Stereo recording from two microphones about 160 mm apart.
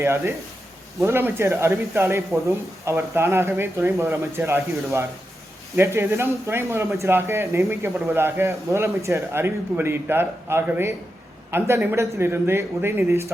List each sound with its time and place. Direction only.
0.0 s speech: 15° right (ahead or behind)